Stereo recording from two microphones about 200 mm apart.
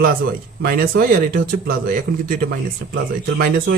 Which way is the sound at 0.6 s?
45° right (ahead or behind).